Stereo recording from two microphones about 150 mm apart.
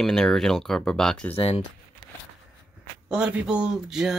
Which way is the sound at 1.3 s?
40° left (ahead or behind).